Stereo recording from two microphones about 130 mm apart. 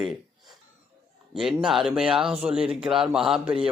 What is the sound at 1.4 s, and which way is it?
Speech, centre (ahead or behind).